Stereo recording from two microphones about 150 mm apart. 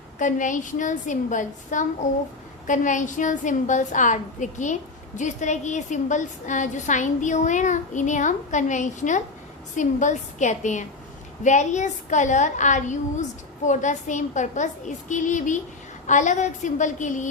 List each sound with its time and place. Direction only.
0.2 s a woman's voice: 60° left (ahead or behind)